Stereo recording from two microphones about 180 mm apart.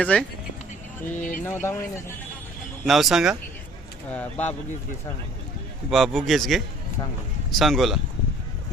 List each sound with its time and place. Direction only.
0.0 s speech: 5° left (ahead or behind)
1.1 s speech: 45° left (ahead or behind)
1.4 s speech: 10° left (ahead or behind)
2.8 s a man's voice: centre (ahead or behind)
4.1 s speech: 10° left (ahead or behind)
5.9 s a man's voice: centre (ahead or behind)